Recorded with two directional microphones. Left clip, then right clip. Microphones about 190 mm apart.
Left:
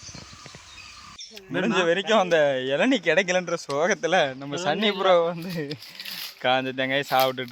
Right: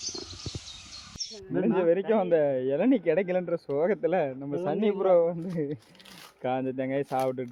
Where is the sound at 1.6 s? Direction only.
15° left (ahead or behind).